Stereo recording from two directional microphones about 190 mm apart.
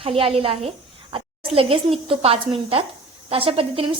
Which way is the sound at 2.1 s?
30° right (ahead or behind).